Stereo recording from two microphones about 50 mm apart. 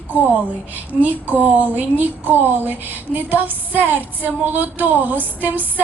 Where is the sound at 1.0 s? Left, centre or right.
Right.